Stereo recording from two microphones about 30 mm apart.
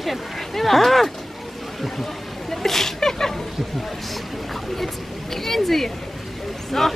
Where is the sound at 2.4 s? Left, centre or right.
Centre.